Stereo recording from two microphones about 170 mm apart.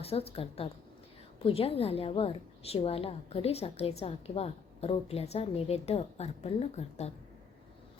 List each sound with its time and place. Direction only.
0.0 s a woman's voice: 35° left (ahead or behind)